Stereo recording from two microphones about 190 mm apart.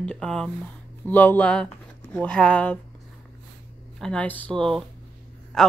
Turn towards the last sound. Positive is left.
turn(degrees=0)  # may be behind; listen again after turning